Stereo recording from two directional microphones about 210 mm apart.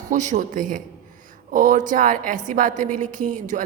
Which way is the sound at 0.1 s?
35° right (ahead or behind).